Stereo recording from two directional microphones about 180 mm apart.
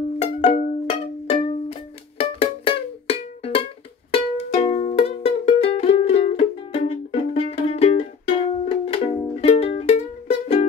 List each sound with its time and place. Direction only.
0.2 s music: 35° left (ahead or behind)